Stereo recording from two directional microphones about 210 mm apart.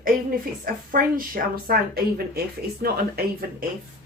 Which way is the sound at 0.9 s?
40° right (ahead or behind).